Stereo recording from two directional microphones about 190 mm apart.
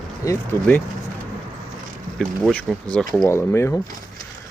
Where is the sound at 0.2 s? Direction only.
20° left (ahead or behind).